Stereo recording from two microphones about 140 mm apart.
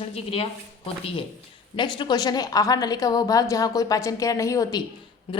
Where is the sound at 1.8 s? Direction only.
35° left (ahead or behind).